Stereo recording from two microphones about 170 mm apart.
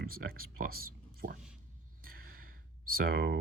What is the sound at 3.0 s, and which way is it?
Speech, 65° right (ahead or behind).